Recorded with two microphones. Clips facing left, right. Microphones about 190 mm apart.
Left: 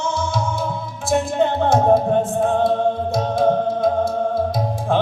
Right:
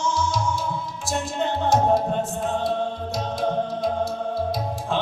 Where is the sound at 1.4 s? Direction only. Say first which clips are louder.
Left 2 dB; 55° left (ahead or behind).